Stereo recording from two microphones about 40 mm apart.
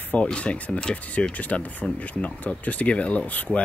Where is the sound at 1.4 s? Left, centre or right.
Left.